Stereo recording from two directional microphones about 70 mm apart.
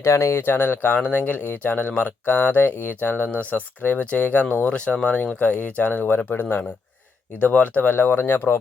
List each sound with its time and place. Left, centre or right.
0.0 s speech: left